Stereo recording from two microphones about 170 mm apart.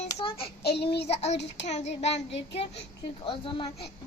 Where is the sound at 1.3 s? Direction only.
90° left.